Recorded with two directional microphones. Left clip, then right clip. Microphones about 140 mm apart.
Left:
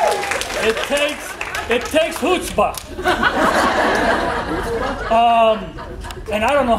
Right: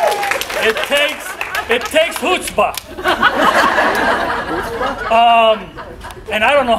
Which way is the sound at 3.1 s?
20° right (ahead or behind).